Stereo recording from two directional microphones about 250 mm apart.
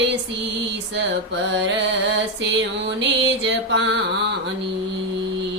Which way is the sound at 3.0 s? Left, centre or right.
Right.